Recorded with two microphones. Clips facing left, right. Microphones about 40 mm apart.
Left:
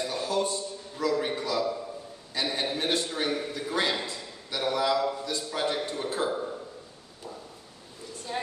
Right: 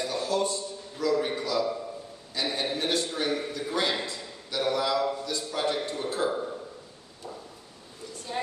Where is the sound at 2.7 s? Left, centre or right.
Left.